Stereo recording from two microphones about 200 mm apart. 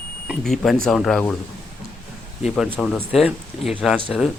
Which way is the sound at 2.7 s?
Centre (ahead or behind).